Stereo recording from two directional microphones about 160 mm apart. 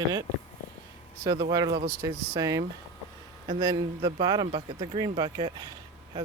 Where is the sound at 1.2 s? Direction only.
25° right (ahead or behind).